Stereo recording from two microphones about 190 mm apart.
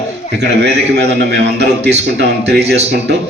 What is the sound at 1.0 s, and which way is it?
A man's voice, 65° right (ahead or behind).